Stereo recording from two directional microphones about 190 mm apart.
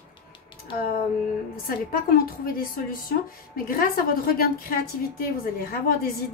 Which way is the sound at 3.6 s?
50° left (ahead or behind).